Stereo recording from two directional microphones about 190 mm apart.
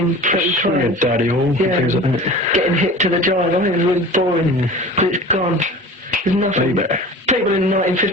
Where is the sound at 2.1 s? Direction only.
35° right (ahead or behind).